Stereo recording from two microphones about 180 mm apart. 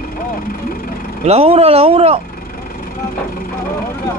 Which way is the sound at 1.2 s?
35° right (ahead or behind).